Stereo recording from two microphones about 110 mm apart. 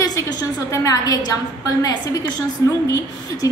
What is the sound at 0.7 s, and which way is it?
A woman's voice, 30° left (ahead or behind).